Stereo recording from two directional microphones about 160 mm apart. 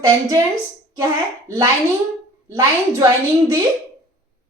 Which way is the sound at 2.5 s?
20° right (ahead or behind).